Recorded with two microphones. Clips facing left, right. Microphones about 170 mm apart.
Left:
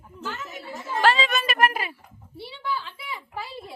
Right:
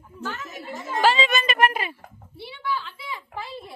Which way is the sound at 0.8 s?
Centre (ahead or behind).